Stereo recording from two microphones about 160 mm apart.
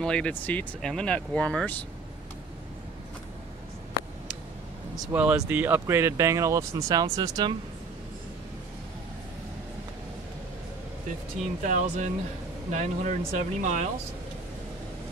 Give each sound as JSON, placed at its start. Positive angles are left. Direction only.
{"t": 0.0, "sound": "speech", "side_deg": 5}
{"t": 4.9, "sound": "speech", "side_deg": -5}
{"t": 11.6, "sound": "speech", "side_deg": -50}